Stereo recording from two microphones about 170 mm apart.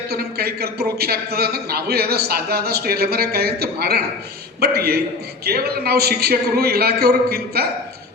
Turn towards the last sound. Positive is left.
turn(degrees=-65)  # may be behind; listen again after turning